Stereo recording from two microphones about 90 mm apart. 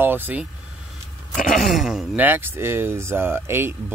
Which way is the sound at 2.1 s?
20° right (ahead or behind).